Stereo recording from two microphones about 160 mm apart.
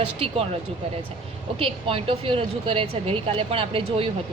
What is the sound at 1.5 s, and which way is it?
A woman's voice, 35° right (ahead or behind).